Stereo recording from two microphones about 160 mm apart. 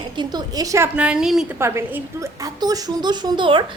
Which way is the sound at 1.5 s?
15° right (ahead or behind).